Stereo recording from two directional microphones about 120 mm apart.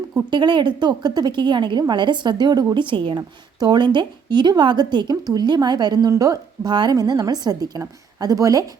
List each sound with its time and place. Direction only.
0.1 s a woman's voice: 40° right (ahead or behind)
3.2 s a woman's voice: 35° right (ahead or behind)